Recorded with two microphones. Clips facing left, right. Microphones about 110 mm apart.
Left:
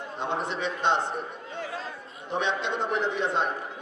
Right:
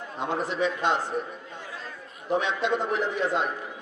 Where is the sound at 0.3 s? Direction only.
25° left (ahead or behind).